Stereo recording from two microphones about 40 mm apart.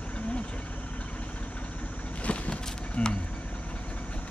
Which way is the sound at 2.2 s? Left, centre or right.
Left.